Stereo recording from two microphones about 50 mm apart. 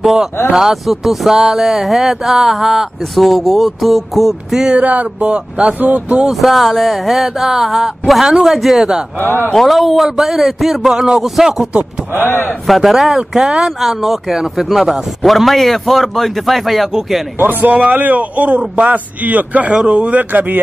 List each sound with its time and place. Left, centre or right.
0.0 s speech: centre
4.7 s speech: right
6.4 s speech: centre
9.2 s a man's voice: left
9.7 s speech: centre
12.3 s a man's voice: left
12.6 s speech: centre
17.4 s a man's voice: right
19.7 s speech: centre
20.2 s a man's voice: right